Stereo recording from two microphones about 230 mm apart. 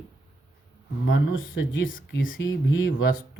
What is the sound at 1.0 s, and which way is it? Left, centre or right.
Speech, left.